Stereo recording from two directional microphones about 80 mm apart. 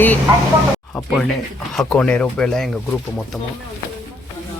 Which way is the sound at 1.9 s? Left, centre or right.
Centre.